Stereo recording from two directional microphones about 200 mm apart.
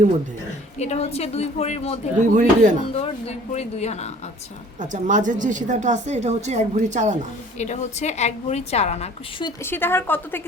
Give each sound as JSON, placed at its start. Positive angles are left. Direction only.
{"t": 0.8, "sound": "a woman's voice", "side_deg": 35}
{"t": 2.3, "sound": "a woman's voice", "side_deg": -40}
{"t": 2.9, "sound": "a woman's voice", "side_deg": 30}
{"t": 4.8, "sound": "a woman's voice", "side_deg": -40}
{"t": 7.6, "sound": "a woman's voice", "side_deg": 35}
{"t": 9.6, "sound": "a woman's voice", "side_deg": 10}